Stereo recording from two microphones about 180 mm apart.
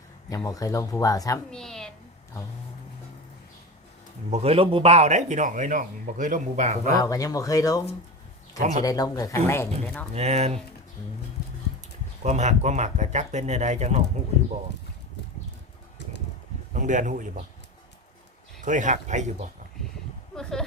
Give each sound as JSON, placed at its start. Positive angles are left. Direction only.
{"t": 0.3, "sound": "speech", "side_deg": 20}
{"t": 1.5, "sound": "a woman's voice", "side_deg": 5}
{"t": 4.3, "sound": "a man's voice", "side_deg": -35}
{"t": 7.0, "sound": "speech", "side_deg": 20}
{"t": 8.5, "sound": "speech", "side_deg": -40}
{"t": 8.8, "sound": "speech", "side_deg": 20}
{"t": 10.2, "sound": "a man's voice", "side_deg": -35}
{"t": 12.2, "sound": "a man's voice", "side_deg": -40}
{"t": 16.7, "sound": "speech", "side_deg": -45}
{"t": 18.6, "sound": "speech", "side_deg": -45}
{"t": 20.3, "sound": "a sound", "side_deg": 5}